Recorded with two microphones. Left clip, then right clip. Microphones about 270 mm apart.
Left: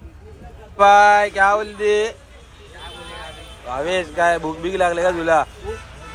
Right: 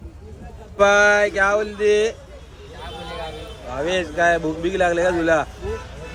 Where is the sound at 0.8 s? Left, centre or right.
Centre.